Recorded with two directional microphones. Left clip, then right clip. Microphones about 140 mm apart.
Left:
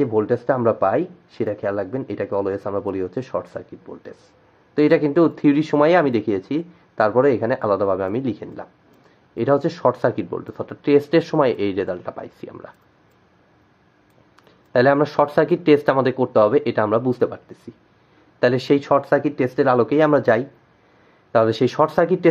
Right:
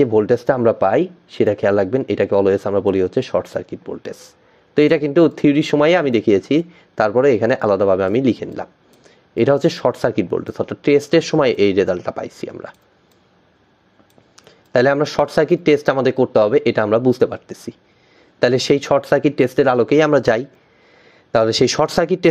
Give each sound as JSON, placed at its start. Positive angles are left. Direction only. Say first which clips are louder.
{"t": 0.0, "sound": "speech", "louder": "right 5 dB", "side_deg": -35}
{"t": 14.3, "sound": "speech", "louder": "right 2 dB", "side_deg": -35}